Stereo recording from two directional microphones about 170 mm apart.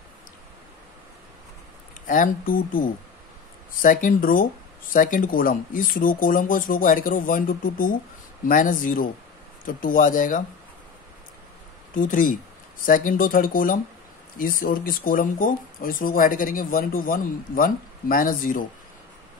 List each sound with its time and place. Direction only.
2.0 s speech: 50° left (ahead or behind)
3.8 s speech: 55° left (ahead or behind)
11.9 s speech: 50° left (ahead or behind)